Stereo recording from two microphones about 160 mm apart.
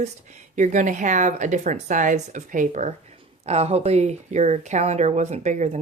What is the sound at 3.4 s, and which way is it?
A woman's voice, 40° right (ahead or behind).